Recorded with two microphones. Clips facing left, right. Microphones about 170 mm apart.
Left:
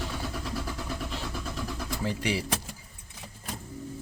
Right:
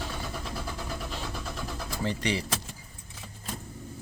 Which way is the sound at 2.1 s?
5° left (ahead or behind).